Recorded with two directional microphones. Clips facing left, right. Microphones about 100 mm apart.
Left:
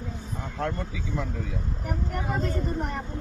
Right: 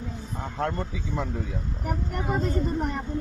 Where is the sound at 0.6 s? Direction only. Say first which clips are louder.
Right 2 dB; 30° right (ahead or behind).